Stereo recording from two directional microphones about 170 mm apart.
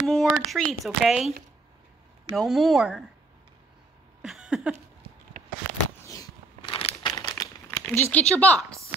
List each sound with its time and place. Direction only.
0.0 s a sound: 5° left (ahead or behind)
0.3 s speech: centre (ahead or behind)
2.3 s speech: centre (ahead or behind)
4.2 s a sound: 5° right (ahead or behind)
6.7 s crumpling: 30° left (ahead or behind)
7.9 s speech: 10° left (ahead or behind)